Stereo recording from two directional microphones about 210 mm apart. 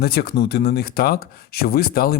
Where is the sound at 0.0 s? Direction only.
50° left (ahead or behind).